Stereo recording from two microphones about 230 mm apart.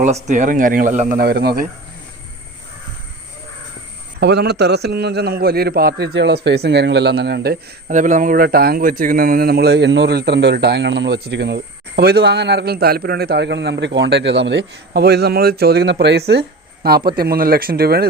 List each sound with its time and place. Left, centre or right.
0.3 s speech: right
4.2 s a man's voice: right